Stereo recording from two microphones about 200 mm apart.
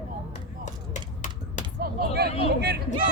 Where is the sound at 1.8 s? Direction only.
50° right (ahead or behind).